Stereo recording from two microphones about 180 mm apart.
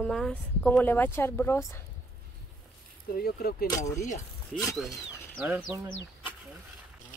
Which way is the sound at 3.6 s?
20° left (ahead or behind).